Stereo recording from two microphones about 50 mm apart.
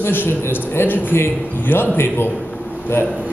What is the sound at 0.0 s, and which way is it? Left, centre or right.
A man's voice, left.